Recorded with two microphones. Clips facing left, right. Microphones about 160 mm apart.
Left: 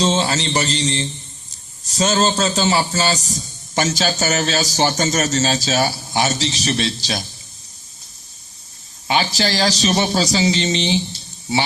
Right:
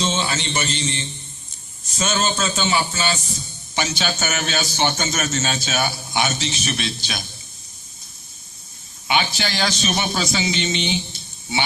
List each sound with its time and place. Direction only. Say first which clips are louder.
0.0 s a man's voice: left 5 dB; 35° left (ahead or behind)
9.0 s a man's voice: left 3 dB; 35° left (ahead or behind)